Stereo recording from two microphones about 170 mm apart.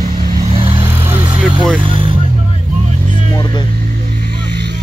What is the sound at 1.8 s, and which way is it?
Vehicle, 30° right (ahead or behind).